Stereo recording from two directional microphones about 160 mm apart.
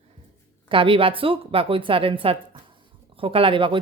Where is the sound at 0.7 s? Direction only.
35° right (ahead or behind).